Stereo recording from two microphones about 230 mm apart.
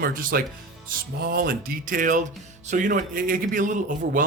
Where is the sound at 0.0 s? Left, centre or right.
Right.